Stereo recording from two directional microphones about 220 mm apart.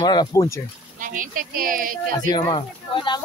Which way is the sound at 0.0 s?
20° left (ahead or behind).